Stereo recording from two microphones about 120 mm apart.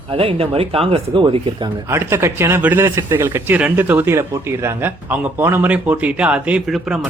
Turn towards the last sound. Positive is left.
turn(degrees=-5)  # may be behind; listen again after turning